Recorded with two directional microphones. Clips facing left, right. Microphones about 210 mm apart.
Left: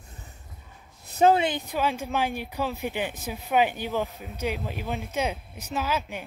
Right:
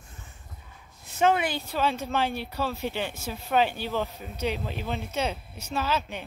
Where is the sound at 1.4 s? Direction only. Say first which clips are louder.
Left 1 dB; 20° left (ahead or behind).